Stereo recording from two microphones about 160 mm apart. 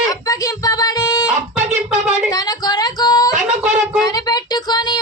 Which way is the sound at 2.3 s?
25° left (ahead or behind).